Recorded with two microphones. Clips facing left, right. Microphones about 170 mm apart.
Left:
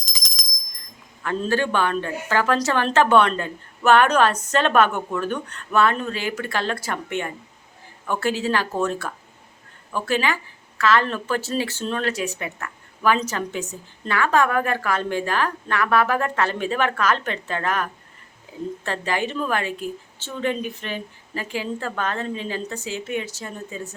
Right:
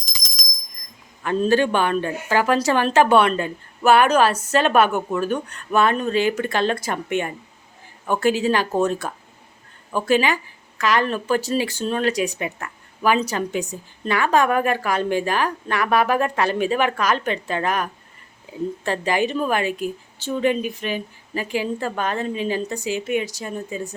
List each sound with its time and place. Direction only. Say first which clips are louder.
1.2 s speech: right 5 dB; 20° right (ahead or behind)
18.9 s speech: right 4 dB; 15° right (ahead or behind)